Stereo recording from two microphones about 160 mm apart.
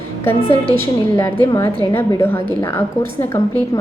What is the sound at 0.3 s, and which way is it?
A woman's voice, 15° left (ahead or behind).